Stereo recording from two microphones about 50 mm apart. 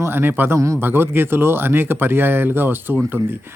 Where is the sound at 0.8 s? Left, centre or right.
Right.